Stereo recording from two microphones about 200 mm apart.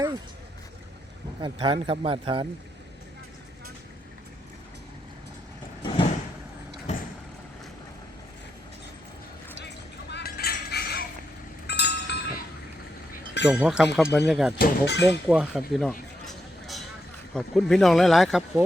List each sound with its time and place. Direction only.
1.4 s speech: 25° right (ahead or behind)
5.8 s vehicle: 25° left (ahead or behind)
9.6 s chink: 60° left (ahead or behind)
11.6 s a sound: 55° left (ahead or behind)
13.5 s speech: 5° right (ahead or behind)
14.6 s speech: 60° left (ahead or behind)
15.3 s speech: 5° right (ahead or behind)
15.7 s a sound: centre (ahead or behind)
17.3 s speech: centre (ahead or behind)